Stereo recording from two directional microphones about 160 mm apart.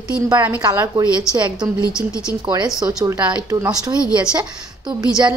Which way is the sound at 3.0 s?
10° right (ahead or behind).